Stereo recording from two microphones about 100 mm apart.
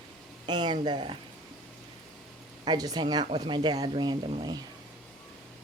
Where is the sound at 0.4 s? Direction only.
45° right (ahead or behind).